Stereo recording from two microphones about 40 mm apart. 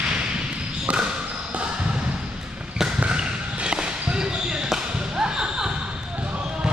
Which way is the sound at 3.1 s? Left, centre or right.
Right.